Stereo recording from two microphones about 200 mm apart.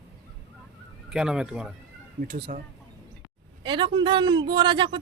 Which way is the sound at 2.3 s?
45° right (ahead or behind).